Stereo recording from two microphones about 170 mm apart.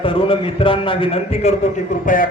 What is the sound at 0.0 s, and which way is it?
A man's voice, 30° left (ahead or behind).